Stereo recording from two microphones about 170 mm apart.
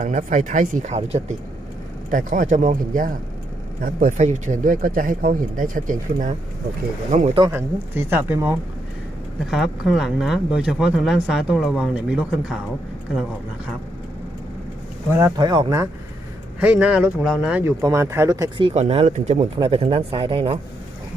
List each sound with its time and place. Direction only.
0.0 s speech: 50° right (ahead or behind)
2.0 s speech: 50° right (ahead or behind)
7.5 s speech: 10° right (ahead or behind)
15.4 s speech: 25° right (ahead or behind)
16.6 s speech: 10° right (ahead or behind)
17.6 s speech: 15° right (ahead or behind); by 20.6 s 35° right (ahead or behind)